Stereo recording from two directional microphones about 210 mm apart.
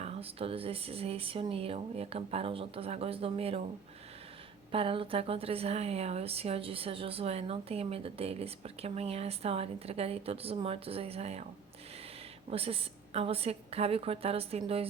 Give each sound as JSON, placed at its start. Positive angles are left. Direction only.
{"t": 0.0, "sound": "speech", "side_deg": -30}
{"t": 4.7, "sound": "speech", "side_deg": -25}
{"t": 12.5, "sound": "speech", "side_deg": -25}